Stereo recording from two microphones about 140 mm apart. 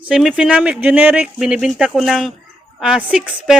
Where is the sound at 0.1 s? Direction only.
5° right (ahead or behind).